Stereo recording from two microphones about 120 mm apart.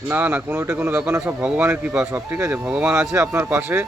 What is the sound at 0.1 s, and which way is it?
Speech, 15° right (ahead or behind).